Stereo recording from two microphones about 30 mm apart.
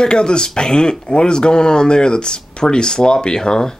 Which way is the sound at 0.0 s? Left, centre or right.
Left.